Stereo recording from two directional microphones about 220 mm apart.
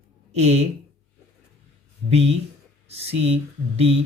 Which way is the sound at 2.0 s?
30° right (ahead or behind).